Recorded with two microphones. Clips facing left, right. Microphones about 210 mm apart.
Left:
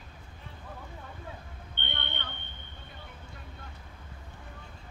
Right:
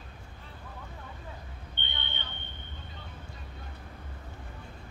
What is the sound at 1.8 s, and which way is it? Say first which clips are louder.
Vehicle: left 4 dB; 60° left (ahead or behind).